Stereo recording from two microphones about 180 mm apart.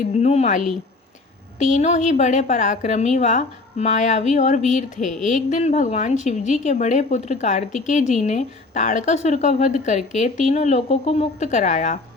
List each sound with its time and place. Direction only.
0.2 s a woman's voice: 40° left (ahead or behind)